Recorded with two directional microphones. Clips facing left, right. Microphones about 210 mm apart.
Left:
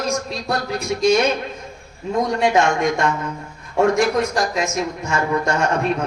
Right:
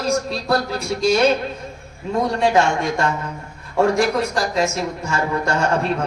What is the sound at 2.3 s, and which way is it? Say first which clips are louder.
Speech: even; 30° right (ahead or behind).